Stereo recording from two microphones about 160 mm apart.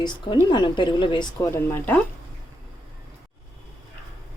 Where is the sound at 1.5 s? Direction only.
15° left (ahead or behind).